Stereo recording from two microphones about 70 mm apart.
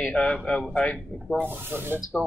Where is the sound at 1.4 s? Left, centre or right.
Right.